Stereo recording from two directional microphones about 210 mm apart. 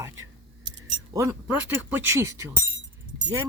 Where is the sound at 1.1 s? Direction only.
15° right (ahead or behind).